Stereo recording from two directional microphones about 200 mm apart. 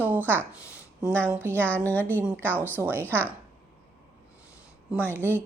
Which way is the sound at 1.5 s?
10° left (ahead or behind).